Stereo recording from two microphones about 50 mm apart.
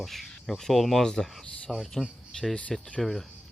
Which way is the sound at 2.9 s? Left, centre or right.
Centre.